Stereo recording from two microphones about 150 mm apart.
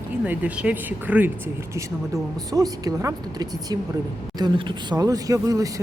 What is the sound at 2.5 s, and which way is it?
A woman's voice, 25° right (ahead or behind).